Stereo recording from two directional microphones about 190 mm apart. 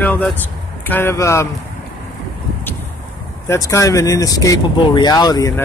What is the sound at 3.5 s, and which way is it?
Speech, 15° left (ahead or behind).